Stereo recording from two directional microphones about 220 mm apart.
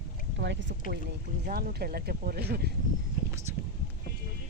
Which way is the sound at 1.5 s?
45° right (ahead or behind).